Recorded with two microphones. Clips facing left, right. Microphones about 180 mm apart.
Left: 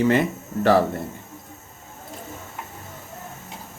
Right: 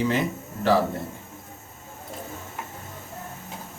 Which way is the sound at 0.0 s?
60° left (ahead or behind).